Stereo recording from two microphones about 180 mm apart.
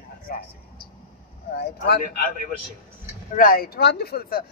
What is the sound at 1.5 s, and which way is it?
Speech, 65° left (ahead or behind).